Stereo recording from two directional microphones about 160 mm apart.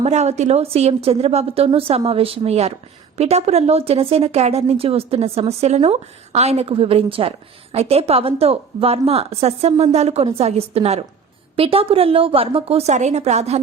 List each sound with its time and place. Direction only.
0.0 s speech: 45° right (ahead or behind)